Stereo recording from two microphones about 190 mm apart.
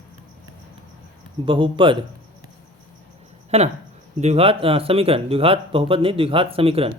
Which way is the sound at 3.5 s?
35° right (ahead or behind).